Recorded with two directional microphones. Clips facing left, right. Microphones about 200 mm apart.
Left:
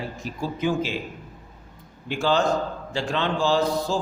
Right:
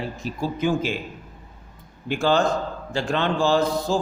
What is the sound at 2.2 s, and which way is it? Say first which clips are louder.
A man's voice: right 1 dB; 50° right (ahead or behind).